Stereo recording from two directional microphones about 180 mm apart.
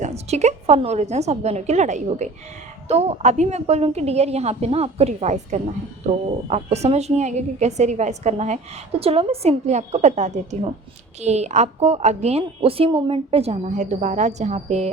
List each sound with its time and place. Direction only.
0.0 s a woman's voice: 35° right (ahead or behind)